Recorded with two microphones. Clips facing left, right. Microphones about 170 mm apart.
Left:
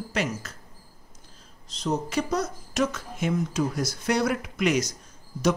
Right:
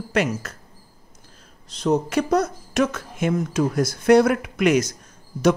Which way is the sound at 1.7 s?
60° right (ahead or behind).